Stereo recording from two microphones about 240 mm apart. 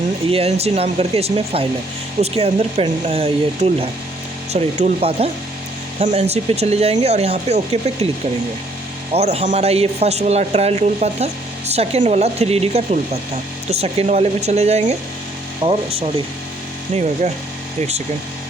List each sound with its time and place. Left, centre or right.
0.3 s speech: right
9.1 s speech: right
16.9 s speech: right